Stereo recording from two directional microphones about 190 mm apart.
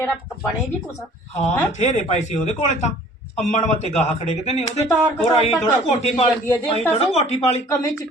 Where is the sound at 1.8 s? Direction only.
35° left (ahead or behind).